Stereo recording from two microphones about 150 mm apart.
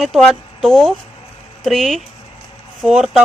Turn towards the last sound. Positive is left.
turn(degrees=-5)  # may be behind; listen again after turning